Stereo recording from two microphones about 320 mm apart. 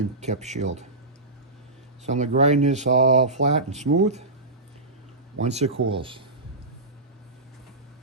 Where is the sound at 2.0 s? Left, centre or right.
Right.